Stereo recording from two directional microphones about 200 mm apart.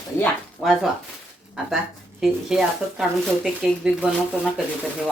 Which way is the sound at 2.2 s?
Centre (ahead or behind).